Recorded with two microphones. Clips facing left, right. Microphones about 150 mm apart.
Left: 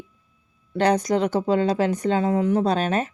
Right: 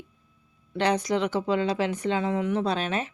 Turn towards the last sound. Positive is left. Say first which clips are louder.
# left 5 dB
turn(degrees=45)  # may be behind; listen again after turning